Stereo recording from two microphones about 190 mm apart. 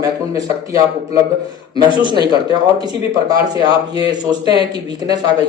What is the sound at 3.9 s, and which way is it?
A man's voice, 20° right (ahead or behind).